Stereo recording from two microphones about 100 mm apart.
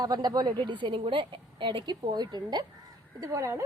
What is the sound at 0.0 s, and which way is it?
A woman's voice, 45° right (ahead or behind).